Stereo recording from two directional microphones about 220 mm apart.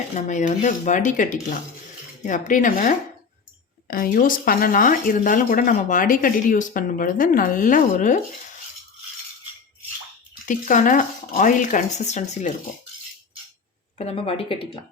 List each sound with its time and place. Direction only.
0.1 s speech: 35° left (ahead or behind)
10.4 s speech: 35° left (ahead or behind)
14.0 s speech: 25° left (ahead or behind)